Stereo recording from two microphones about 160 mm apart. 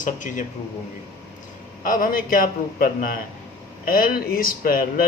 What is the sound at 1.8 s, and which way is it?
Speech, 60° left (ahead or behind).